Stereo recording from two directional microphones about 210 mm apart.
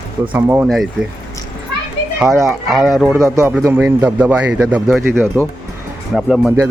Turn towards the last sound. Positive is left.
turn(degrees=0)  # may be behind; listen again after turning